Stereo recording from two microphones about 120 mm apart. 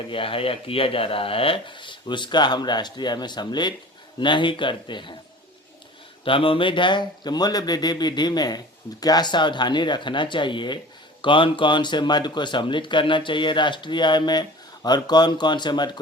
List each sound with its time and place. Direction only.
0.1 s speech: 50° left (ahead or behind)
6.2 s speech: 45° left (ahead or behind)